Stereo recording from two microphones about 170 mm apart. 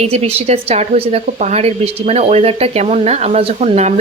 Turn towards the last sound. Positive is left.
turn(degrees=-40)  # may be behind; listen again after turning